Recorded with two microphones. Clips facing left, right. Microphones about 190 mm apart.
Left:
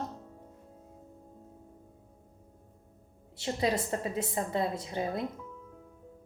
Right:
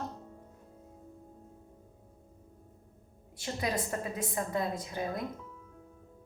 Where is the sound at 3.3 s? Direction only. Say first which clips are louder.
Left 4 dB; 25° left (ahead or behind).